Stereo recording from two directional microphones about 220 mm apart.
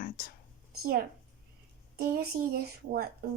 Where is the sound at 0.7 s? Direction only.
45° right (ahead or behind).